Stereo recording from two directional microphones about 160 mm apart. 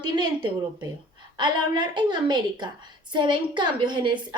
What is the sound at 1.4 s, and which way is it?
A woman's voice, 30° right (ahead or behind).